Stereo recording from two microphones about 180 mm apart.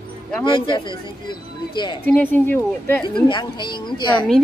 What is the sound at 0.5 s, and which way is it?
Speech, 25° left (ahead or behind).